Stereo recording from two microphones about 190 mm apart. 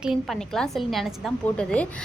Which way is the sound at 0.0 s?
Centre (ahead or behind).